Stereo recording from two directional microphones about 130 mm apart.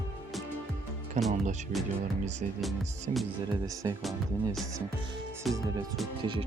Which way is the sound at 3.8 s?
30° right (ahead or behind).